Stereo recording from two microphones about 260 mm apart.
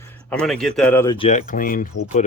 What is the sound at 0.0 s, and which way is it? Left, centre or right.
Speech, centre.